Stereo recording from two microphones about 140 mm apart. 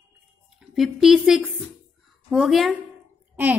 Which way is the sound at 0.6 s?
Centre (ahead or behind).